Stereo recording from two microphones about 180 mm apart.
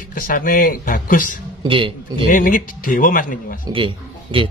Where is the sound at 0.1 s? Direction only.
50° left (ahead or behind).